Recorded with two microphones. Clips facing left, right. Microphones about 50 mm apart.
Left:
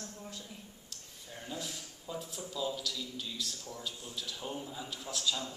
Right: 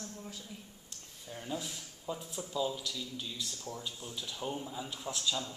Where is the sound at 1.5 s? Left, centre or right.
Centre.